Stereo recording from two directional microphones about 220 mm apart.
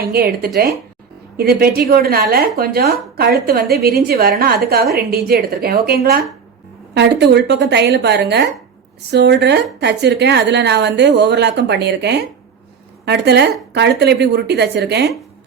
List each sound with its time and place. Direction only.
0.0 s a woman's voice: 45° right (ahead or behind)